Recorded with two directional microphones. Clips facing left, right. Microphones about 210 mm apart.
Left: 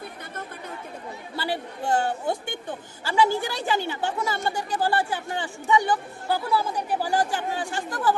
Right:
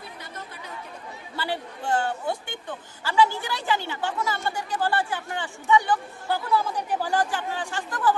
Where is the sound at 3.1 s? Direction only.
15° left (ahead or behind).